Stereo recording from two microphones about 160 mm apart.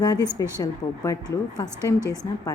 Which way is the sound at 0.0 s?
25° left (ahead or behind).